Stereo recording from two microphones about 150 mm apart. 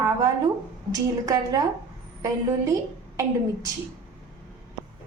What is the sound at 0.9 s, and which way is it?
Speech, 25° right (ahead or behind).